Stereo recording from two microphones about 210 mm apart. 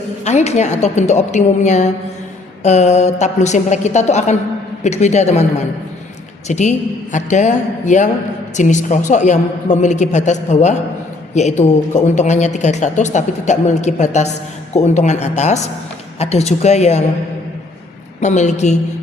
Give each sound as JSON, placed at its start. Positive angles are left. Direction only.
{"t": 0.3, "sound": "a woman's voice", "side_deg": 35}
{"t": 6.5, "sound": "a woman's voice", "side_deg": 35}
{"t": 18.2, "sound": "a woman's voice", "side_deg": 35}